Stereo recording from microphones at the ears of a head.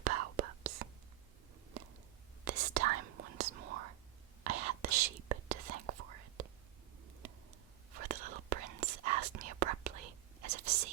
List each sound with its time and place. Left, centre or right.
0.0 s whispering: right
2.4 s whispering: right
7.9 s whispering: right